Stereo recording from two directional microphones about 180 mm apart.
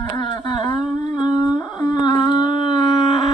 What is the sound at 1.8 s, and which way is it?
Dog, 25° left (ahead or behind).